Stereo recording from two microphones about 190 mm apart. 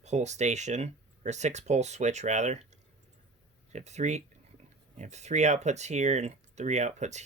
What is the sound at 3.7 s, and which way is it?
Speech, 35° right (ahead or behind).